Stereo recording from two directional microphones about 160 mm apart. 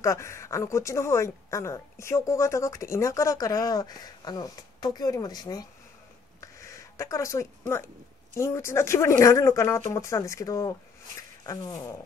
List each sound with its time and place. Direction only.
0.0 s speech: 20° left (ahead or behind)
6.4 s a sound: 20° left (ahead or behind)
8.4 s speech: 15° left (ahead or behind)